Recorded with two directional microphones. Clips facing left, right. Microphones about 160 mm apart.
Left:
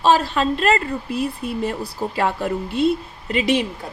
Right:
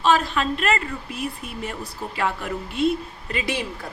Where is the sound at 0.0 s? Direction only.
35° left (ahead or behind).